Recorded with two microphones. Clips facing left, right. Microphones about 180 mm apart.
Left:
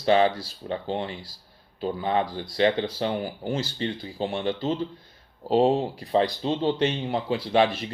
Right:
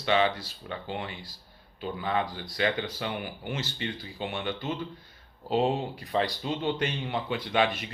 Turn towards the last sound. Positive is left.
turn(degrees=35)  # may be behind; listen again after turning